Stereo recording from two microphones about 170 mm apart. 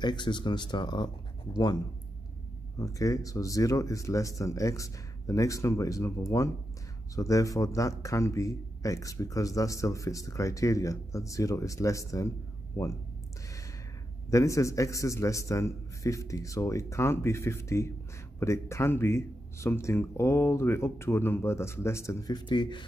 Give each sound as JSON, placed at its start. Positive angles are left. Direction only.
{"t": 0.0, "sound": "speech", "side_deg": 25}
{"t": 2.8, "sound": "speech", "side_deg": 20}
{"t": 14.3, "sound": "speech", "side_deg": 20}